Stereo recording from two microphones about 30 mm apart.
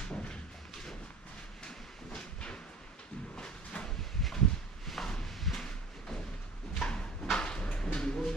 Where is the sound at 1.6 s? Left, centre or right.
Left.